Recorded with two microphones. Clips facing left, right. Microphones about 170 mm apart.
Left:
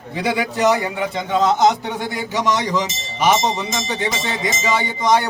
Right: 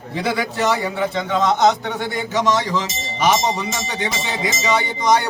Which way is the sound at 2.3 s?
15° left (ahead or behind).